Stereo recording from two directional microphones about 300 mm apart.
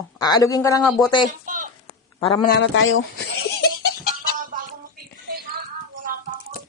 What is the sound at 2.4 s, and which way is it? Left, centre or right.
Speech, left.